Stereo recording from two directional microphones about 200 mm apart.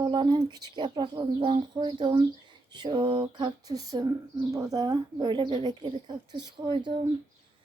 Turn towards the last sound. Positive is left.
turn(degrees=-25)  # may be behind; listen again after turning